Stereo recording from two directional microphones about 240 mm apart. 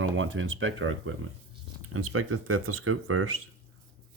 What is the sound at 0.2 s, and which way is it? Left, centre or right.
Speech, right.